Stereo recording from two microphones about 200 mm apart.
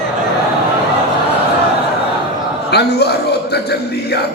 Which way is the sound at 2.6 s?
55° left (ahead or behind).